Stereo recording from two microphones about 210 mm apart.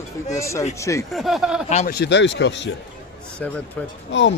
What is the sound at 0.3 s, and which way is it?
Speech, 15° left (ahead or behind).